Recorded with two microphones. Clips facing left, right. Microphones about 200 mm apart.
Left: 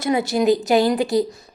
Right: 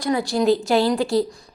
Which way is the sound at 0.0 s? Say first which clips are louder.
Left 1 dB; 20° left (ahead or behind).